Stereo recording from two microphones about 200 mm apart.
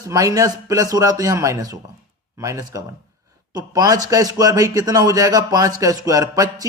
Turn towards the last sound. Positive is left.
turn(degrees=-15)  # may be behind; listen again after turning